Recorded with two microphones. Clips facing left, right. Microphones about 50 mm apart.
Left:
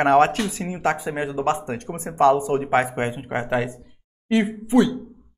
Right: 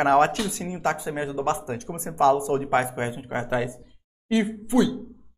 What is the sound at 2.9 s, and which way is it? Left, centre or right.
Speech, left.